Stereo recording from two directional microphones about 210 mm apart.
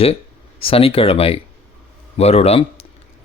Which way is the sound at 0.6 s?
25° left (ahead or behind).